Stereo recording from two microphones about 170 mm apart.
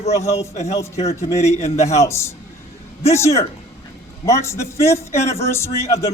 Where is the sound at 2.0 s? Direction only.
15° left (ahead or behind).